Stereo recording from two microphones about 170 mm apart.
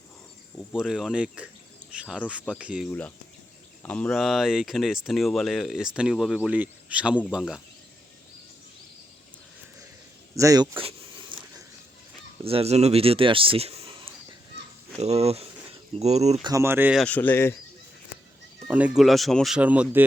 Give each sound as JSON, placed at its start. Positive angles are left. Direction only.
{"t": 0.7, "sound": "speech", "side_deg": -5}
{"t": 3.8, "sound": "speech", "side_deg": 5}
{"t": 10.3, "sound": "a sound", "side_deg": -20}
{"t": 12.4, "sound": "speech", "side_deg": -35}
{"t": 16.4, "sound": "speech", "side_deg": -20}
{"t": 17.0, "sound": "speech", "side_deg": 10}
{"t": 18.7, "sound": "speech", "side_deg": -5}